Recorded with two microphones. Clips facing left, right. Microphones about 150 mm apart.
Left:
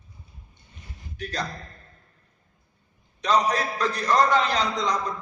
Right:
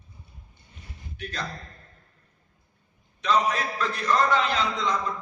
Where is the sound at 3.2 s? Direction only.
40° left (ahead or behind).